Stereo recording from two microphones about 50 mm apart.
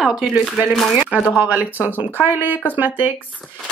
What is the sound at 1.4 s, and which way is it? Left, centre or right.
Speech, right.